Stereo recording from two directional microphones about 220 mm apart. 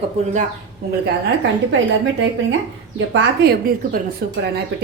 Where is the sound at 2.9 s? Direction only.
55° right (ahead or behind).